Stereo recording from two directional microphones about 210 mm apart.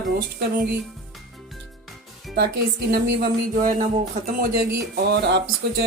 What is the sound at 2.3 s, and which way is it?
Speech, 50° right (ahead or behind).